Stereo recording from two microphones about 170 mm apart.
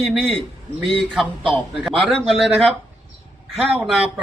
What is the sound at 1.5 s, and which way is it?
A man's voice, 5° right (ahead or behind).